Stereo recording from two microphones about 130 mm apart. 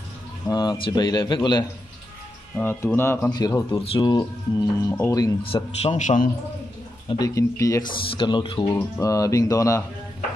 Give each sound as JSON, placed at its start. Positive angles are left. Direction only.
{"t": 0.5, "sound": "speech", "side_deg": 30}
{"t": 2.5, "sound": "speech", "side_deg": 15}
{"t": 3.3, "sound": "speech", "side_deg": 30}
{"t": 3.7, "sound": "speech", "side_deg": 45}
{"t": 5.4, "sound": "a man's voice", "side_deg": 45}
{"t": 5.9, "sound": "a man's voice", "side_deg": 75}
{"t": 7.1, "sound": "speech", "side_deg": 30}
{"t": 8.2, "sound": "speech", "side_deg": 40}